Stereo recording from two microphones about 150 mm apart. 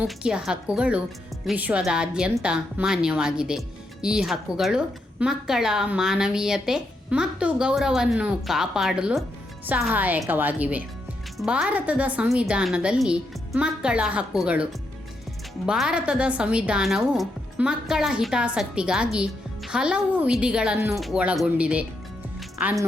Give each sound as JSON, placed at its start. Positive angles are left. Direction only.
{"t": 0.0, "sound": "a woman's voice", "side_deg": -5}
{"t": 20.7, "sound": "a woman's voice", "side_deg": -15}
{"t": 21.0, "sound": "a woman's voice", "side_deg": -5}